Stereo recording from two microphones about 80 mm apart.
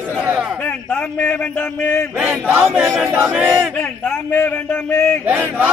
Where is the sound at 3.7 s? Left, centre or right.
Centre.